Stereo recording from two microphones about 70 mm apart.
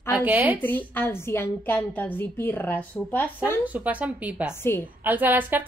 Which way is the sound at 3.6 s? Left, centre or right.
Right.